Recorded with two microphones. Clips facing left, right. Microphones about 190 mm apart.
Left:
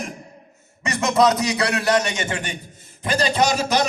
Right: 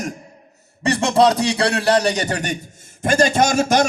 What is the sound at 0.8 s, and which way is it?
A man's voice, 30° right (ahead or behind).